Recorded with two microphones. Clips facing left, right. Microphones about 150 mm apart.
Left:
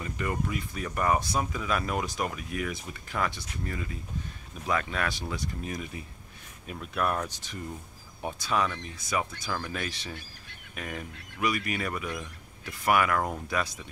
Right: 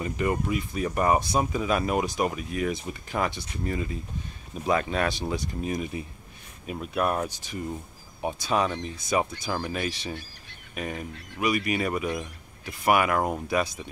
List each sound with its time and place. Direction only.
0.0 s speech: 20° right (ahead or behind)